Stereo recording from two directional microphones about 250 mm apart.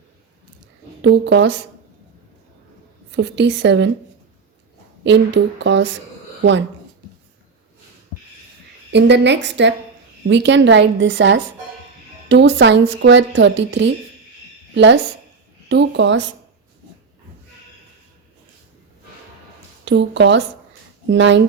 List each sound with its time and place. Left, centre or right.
1.0 s a woman's voice: right
3.2 s a woman's voice: right
5.0 s a woman's voice: right
8.9 s a woman's voice: right
15.7 s a woman's voice: right
19.8 s a woman's voice: right